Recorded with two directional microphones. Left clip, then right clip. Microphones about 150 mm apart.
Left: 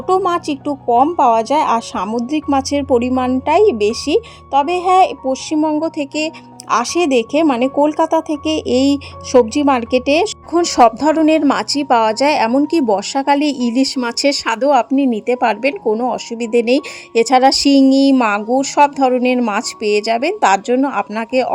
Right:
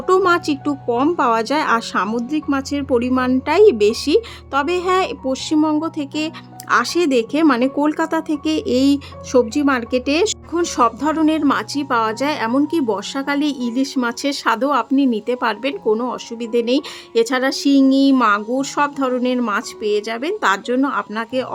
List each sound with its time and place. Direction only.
0.1 s a woman's voice: 5° right (ahead or behind)
2.3 s speech: 15° left (ahead or behind)
3.1 s a woman's voice: centre (ahead or behind); by 21.5 s 20° left (ahead or behind)